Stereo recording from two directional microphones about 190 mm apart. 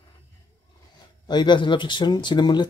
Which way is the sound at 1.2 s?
25° left (ahead or behind).